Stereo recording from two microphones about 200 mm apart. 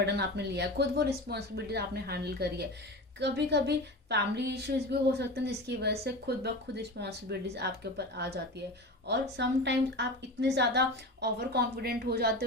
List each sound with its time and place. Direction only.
0.0 s a woman's voice: 55° right (ahead or behind)